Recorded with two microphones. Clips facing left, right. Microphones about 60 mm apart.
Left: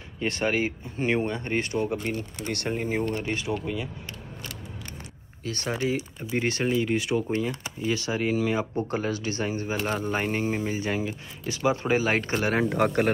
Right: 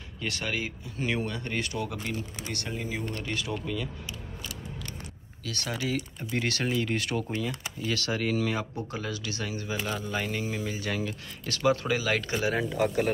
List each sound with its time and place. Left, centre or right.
0.2 s speech: left
2.4 s speech: left
3.6 s speech: centre
5.4 s speech: left
5.9 s speech: centre
6.4 s speech: left
6.7 s speech: centre
8.7 s speech: left
9.8 s speech: left
11.1 s speech: centre
12.0 s speech: left
12.4 s speech: left